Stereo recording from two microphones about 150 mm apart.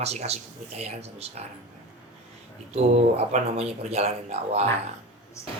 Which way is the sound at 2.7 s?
50° right (ahead or behind).